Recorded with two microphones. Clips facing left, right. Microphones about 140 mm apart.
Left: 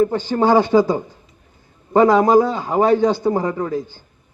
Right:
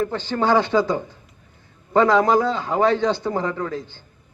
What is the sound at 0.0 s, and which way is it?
A man's voice, 15° left (ahead or behind).